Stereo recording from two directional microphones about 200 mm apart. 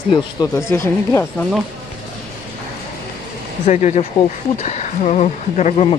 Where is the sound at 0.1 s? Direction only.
15° left (ahead or behind).